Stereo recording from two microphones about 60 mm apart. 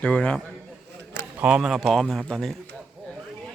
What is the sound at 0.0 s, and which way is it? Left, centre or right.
Speech, centre.